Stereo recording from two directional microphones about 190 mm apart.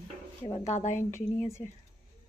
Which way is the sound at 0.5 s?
35° left (ahead or behind).